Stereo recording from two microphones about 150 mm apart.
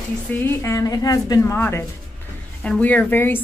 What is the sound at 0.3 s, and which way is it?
A woman's voice, 15° left (ahead or behind).